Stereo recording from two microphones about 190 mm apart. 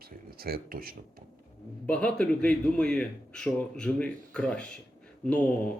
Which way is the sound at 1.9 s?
5° left (ahead or behind).